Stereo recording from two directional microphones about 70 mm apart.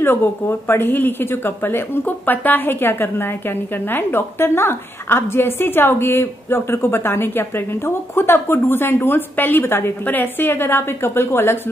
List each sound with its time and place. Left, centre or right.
0.0 s a woman's voice: left